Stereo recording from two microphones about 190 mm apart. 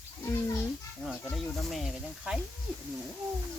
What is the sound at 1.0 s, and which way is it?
Speech, centre (ahead or behind).